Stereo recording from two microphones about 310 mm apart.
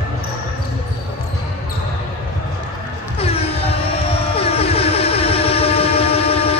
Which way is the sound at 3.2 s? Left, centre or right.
Centre.